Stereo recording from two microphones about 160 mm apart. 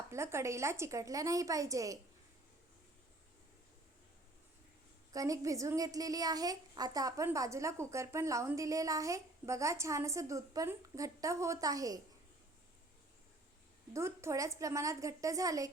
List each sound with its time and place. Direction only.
0.1 s a woman's voice: 15° right (ahead or behind)
5.1 s a woman's voice: 20° right (ahead or behind)
13.9 s a woman's voice: 15° right (ahead or behind)